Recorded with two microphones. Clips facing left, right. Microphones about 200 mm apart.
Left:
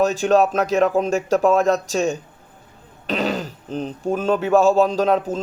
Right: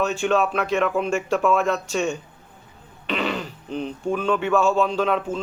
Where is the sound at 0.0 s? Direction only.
40° left (ahead or behind).